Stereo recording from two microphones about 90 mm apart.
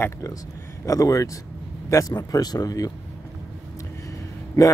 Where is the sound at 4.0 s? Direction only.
35° left (ahead or behind).